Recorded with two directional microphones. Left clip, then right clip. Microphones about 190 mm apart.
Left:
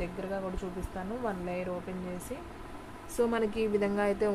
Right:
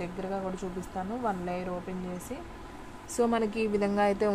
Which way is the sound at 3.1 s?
30° right (ahead or behind).